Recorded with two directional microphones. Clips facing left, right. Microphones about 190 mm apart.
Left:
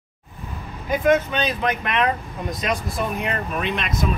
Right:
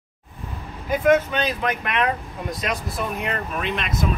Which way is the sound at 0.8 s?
5° right (ahead or behind).